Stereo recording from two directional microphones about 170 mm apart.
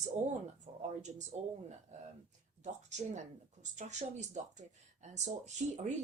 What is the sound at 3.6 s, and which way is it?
A woman's voice, 45° right (ahead or behind).